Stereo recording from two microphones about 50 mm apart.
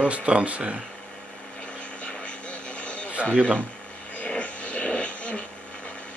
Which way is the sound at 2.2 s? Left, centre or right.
Left.